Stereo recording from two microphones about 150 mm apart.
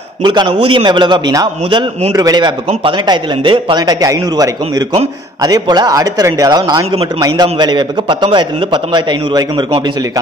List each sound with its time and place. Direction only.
0.2 s a man's voice: 30° right (ahead or behind)